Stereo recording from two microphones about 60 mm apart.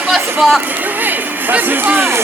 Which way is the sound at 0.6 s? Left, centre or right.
Right.